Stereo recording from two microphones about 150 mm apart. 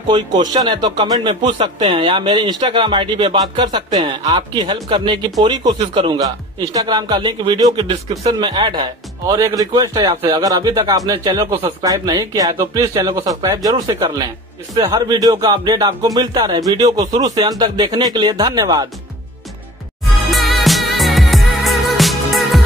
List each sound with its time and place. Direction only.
0.1 s speech: 30° right (ahead or behind)
6.2 s speech: 25° right (ahead or behind)
20.2 s music: centre (ahead or behind)